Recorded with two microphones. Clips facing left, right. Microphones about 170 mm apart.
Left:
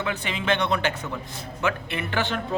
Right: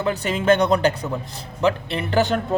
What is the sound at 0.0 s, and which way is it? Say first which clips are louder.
Speech: right 7 dB; 40° right (ahead or behind).